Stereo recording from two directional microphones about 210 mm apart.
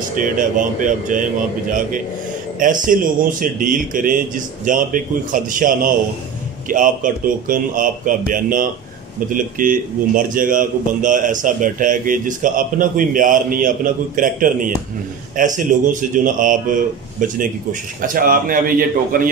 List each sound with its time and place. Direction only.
0.1 s speech: 40° right (ahead or behind)